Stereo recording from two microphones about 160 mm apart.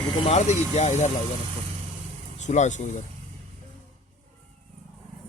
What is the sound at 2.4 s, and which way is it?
Speech, 50° left (ahead or behind).